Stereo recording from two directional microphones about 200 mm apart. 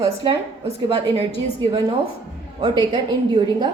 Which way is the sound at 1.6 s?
25° right (ahead or behind).